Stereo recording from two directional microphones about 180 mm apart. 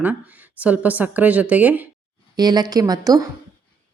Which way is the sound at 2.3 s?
20° right (ahead or behind).